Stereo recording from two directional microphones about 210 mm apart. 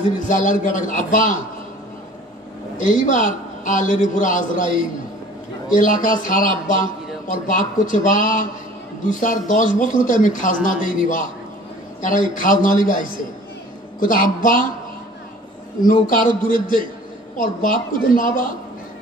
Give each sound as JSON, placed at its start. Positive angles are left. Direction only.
{"t": 0.3, "sound": "a man's voice", "side_deg": 35}
{"t": 2.8, "sound": "a man's voice", "side_deg": 35}
{"t": 15.9, "sound": "a man's voice", "side_deg": 40}